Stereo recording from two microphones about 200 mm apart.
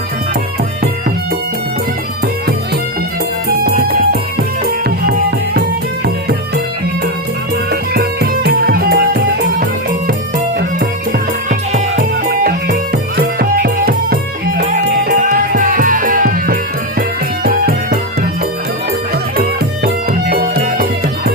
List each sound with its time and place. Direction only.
3.8 s music: 50° right (ahead or behind)
7.7 s music: 50° right (ahead or behind)
10.8 s music: 40° right (ahead or behind)
19.4 s music: 50° right (ahead or behind)